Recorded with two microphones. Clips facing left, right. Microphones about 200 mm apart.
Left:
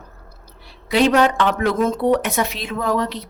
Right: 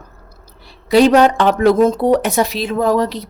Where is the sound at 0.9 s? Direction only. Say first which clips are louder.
Right 5 dB; 40° right (ahead or behind).